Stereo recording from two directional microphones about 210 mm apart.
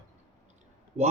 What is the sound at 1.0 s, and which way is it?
Speech, 30° right (ahead or behind).